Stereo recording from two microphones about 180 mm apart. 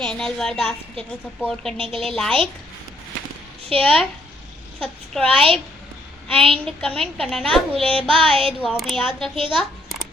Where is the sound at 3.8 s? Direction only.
5° left (ahead or behind).